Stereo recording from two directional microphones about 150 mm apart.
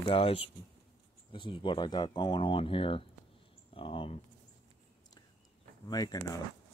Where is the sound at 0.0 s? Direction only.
40° left (ahead or behind).